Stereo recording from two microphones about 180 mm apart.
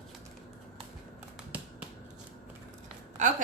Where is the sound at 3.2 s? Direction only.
45° right (ahead or behind).